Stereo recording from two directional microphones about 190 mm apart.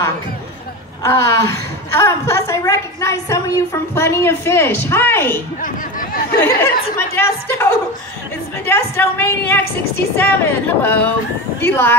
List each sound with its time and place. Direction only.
1.0 s a woman's voice: 15° left (ahead or behind)
5.6 s chatter: 45° left (ahead or behind)
6.4 s a woman's voice: 10° left (ahead or behind)